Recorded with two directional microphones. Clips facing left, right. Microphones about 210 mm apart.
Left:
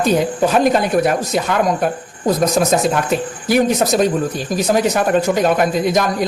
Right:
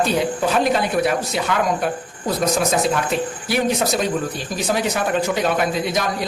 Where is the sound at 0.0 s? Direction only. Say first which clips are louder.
Left 4 dB; 45° left (ahead or behind).